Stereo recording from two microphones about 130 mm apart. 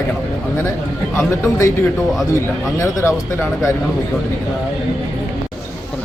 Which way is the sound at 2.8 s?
20° left (ahead or behind).